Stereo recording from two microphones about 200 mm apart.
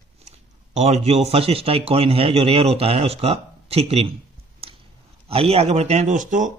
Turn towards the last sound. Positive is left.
turn(degrees=-40)  # may be behind; listen again after turning